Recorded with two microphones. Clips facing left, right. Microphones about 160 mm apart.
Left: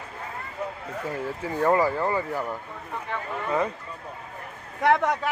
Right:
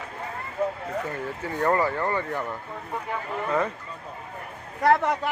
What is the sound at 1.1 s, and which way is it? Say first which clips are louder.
Speech: left 1 dB; 5° left (ahead or behind).